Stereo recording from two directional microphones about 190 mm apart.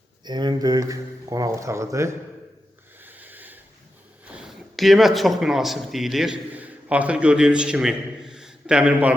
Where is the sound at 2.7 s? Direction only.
10° right (ahead or behind).